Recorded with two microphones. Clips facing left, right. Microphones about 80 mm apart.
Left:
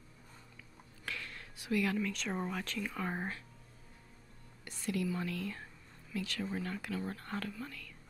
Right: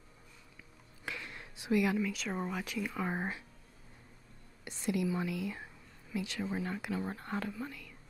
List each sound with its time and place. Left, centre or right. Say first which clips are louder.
1.0 s speech: right 1 dB; centre
4.6 s speech: right 3 dB; centre